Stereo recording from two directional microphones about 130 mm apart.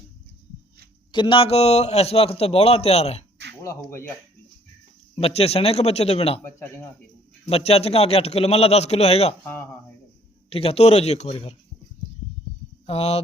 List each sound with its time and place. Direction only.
1.1 s a man's voice: 40° left (ahead or behind)
3.8 s speech: 15° left (ahead or behind)
5.2 s a man's voice: 50° left (ahead or behind)
7.5 s a man's voice: 50° left (ahead or behind)
10.5 s a man's voice: 50° left (ahead or behind)
12.8 s speech: 55° left (ahead or behind)